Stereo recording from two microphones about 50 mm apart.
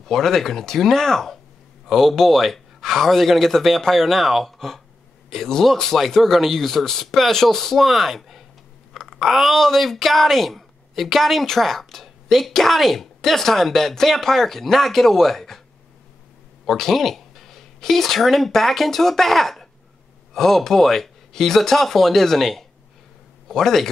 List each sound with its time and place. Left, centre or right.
0.0 s speech: centre
16.6 s speech: centre